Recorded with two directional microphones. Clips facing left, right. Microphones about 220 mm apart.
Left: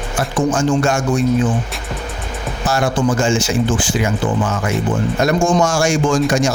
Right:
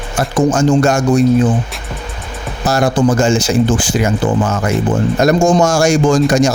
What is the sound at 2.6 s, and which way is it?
Speech, 40° right (ahead or behind).